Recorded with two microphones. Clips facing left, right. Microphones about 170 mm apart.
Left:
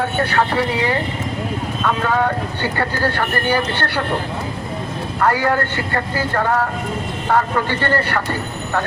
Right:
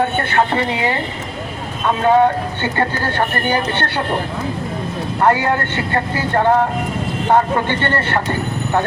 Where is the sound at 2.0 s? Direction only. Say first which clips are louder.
Right 9 dB; 25° right (ahead or behind).